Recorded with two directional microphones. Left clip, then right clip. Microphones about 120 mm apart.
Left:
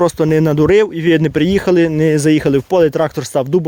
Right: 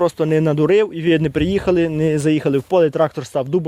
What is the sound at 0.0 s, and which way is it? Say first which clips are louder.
Speech: left 4 dB; 40° left (ahead or behind).